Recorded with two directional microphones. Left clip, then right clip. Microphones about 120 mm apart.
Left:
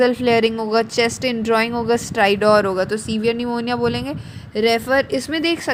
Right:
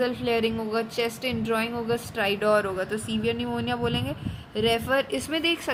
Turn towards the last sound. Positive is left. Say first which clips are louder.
# left 6 dB
turn(degrees=35)  # may be behind; listen again after turning